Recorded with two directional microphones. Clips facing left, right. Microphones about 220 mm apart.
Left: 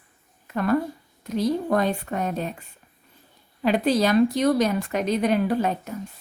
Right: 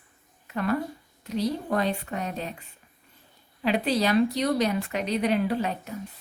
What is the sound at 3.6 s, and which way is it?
A woman's voice, 45° left (ahead or behind).